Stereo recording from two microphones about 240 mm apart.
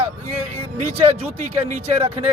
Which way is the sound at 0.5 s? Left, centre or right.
Right.